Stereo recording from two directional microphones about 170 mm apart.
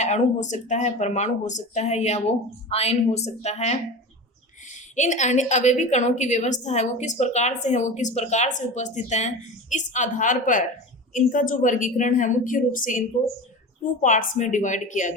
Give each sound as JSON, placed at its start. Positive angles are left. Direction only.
{"t": 0.0, "sound": "a woman's voice", "side_deg": 45}
{"t": 4.9, "sound": "a woman's voice", "side_deg": 45}